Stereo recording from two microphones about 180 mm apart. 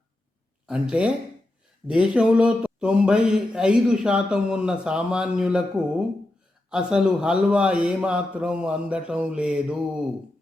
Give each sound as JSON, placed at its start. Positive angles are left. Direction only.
{"t": 0.7, "sound": "speech", "side_deg": -5}
{"t": 6.7, "sound": "speech", "side_deg": -5}